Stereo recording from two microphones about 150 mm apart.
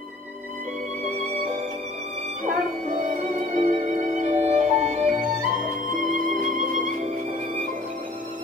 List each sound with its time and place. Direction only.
2.4 s music: 65° right (ahead or behind)